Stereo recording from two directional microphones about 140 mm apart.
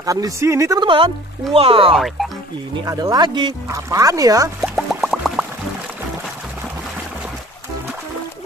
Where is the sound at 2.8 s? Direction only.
25° right (ahead or behind).